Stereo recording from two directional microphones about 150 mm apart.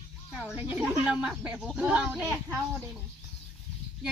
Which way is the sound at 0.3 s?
5° right (ahead or behind).